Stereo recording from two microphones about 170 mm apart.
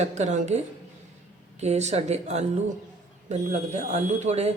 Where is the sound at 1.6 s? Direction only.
40° right (ahead or behind).